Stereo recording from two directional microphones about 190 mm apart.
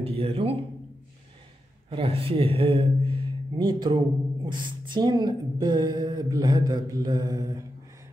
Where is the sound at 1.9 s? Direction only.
30° right (ahead or behind).